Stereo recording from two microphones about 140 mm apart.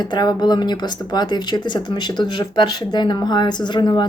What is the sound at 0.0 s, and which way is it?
Speech, 30° left (ahead or behind).